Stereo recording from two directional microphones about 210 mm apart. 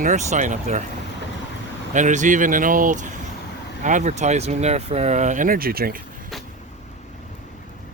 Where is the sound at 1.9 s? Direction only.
35° right (ahead or behind).